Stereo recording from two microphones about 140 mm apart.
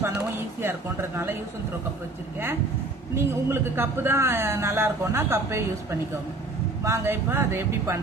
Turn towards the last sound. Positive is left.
turn(degrees=-15)  # may be behind; listen again after turning